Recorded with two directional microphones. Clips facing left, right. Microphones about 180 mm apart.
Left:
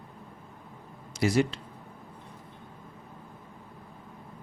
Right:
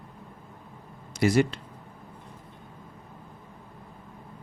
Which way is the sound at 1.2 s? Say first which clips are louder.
Right 3 dB; 60° right (ahead or behind).